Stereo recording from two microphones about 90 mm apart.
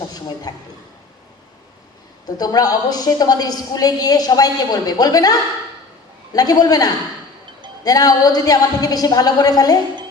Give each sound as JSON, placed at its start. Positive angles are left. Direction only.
{"t": 0.1, "sound": "a woman's voice", "side_deg": 45}
{"t": 2.2, "sound": "a woman's voice", "side_deg": 45}